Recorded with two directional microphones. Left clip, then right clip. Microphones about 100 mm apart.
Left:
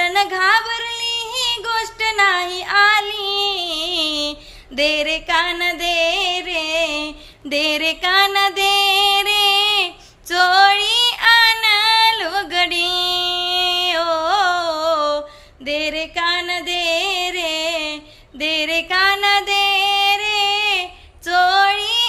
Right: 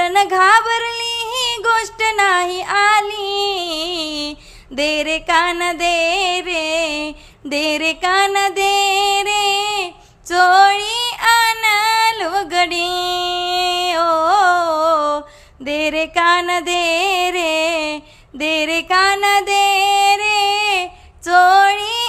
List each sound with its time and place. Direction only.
0.0 s music: 45° right (ahead or behind)
0.6 s female singing: 60° right (ahead or behind)
0.9 s music: 55° right (ahead or behind)
2.0 s female singing: 40° right (ahead or behind)
3.9 s a sound: 35° right (ahead or behind)
4.8 s music: 45° right (ahead or behind)
7.5 s child singing: 45° right (ahead or behind); by 9.9 s 30° right (ahead or behind)
10.2 s female singing: 50° right (ahead or behind)
15.6 s music: 60° right (ahead or behind)
21.2 s female singing: 60° right (ahead or behind)